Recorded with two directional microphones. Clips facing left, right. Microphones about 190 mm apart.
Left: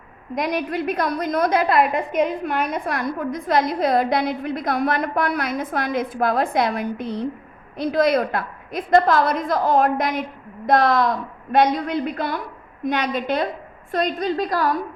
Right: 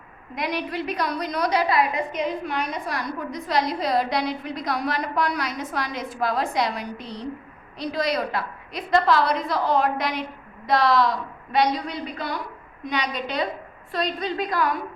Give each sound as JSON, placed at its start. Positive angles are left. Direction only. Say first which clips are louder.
{"t": 0.3, "sound": "a woman's voice", "louder": "left 4 dB", "side_deg": 45}